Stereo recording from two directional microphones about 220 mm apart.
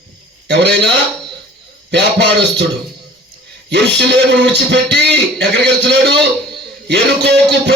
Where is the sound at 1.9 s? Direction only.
50° right (ahead or behind).